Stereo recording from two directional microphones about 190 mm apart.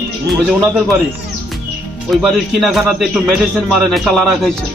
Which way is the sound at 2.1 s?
Centre (ahead or behind).